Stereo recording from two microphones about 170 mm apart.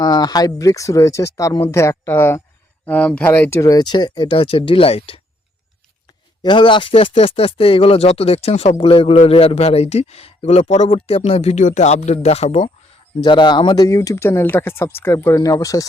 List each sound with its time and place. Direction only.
0.0 s speech: 25° left (ahead or behind)
6.4 s speech: 30° left (ahead or behind)
13.2 s speech: 25° left (ahead or behind)